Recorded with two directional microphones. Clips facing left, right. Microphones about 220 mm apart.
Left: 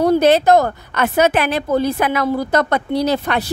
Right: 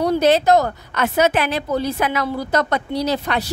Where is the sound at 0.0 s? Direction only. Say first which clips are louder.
Left 3 dB; 55° left (ahead or behind).